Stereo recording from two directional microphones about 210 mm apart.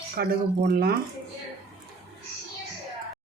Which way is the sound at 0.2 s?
50° right (ahead or behind).